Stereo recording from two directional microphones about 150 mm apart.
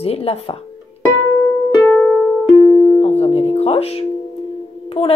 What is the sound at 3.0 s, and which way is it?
Music, 40° left (ahead or behind).